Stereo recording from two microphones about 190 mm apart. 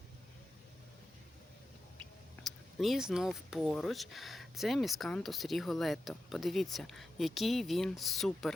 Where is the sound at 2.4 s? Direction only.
Centre (ahead or behind).